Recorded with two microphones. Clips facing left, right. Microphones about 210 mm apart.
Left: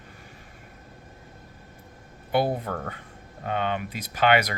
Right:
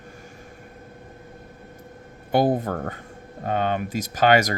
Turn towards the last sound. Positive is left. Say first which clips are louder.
# right 3 dB
turn(degrees=-40)  # may be behind; listen again after turning